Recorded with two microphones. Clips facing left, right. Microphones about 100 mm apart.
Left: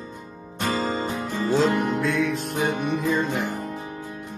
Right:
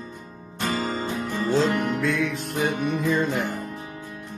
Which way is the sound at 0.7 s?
25° left (ahead or behind).